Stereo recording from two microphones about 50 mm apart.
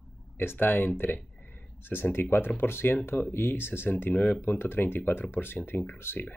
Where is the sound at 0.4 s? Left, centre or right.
Left.